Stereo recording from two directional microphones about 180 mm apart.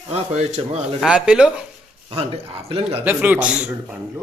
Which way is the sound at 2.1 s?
35° right (ahead or behind).